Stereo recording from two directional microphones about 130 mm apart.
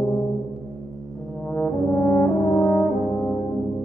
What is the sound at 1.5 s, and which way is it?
Brass instrument, 15° left (ahead or behind).